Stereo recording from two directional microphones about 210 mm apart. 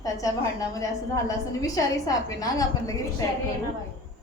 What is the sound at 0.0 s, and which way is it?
A woman's voice, 15° left (ahead or behind).